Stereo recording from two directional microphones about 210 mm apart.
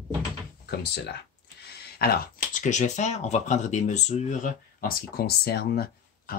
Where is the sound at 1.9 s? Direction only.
45° left (ahead or behind).